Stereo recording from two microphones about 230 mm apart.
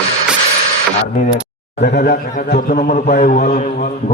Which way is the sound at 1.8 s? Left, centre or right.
Left.